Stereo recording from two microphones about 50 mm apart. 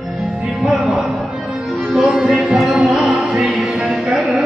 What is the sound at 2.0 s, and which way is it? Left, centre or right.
Music, centre.